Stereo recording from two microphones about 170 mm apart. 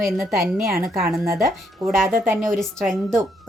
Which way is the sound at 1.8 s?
Centre (ahead or behind).